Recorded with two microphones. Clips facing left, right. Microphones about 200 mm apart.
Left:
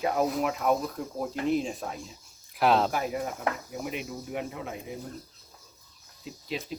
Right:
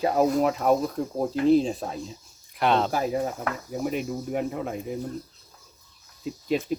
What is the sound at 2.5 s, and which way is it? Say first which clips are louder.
Speech: even; centre (ahead or behind).